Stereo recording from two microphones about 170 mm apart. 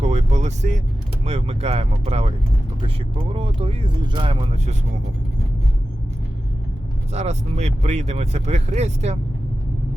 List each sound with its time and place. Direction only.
0.0 s vehicle: 40° right (ahead or behind)
1.2 s speech: 40° right (ahead or behind)
7.1 s speech: 40° right (ahead or behind)